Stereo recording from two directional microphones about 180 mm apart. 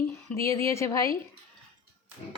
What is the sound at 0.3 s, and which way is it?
Speech, 15° left (ahead or behind).